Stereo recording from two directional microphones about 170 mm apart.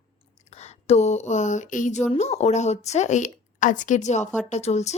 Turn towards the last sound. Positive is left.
turn(degrees=40)  # may be behind; listen again after turning